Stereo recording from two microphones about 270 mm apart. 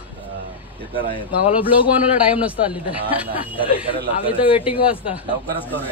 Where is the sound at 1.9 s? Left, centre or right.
Centre.